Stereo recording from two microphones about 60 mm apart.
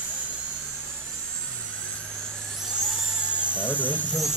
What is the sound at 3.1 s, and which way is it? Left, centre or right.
Electric toothbrush, centre.